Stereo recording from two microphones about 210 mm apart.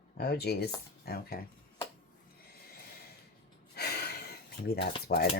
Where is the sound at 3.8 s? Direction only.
50° left (ahead or behind).